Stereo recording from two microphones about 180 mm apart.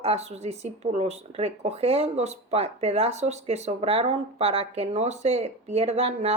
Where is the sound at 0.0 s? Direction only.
35° right (ahead or behind).